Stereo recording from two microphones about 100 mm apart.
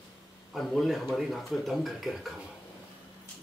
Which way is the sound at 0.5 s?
Centre (ahead or behind).